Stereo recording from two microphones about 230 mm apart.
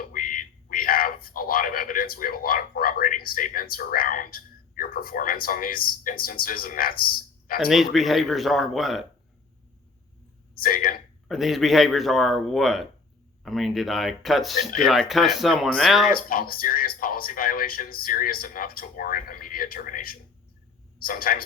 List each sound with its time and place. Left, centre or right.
0.0 s a sound: left
4.8 s speech: left
7.6 s speech: centre
10.6 s speech: left
11.3 s speech: centre
16.1 s speech: left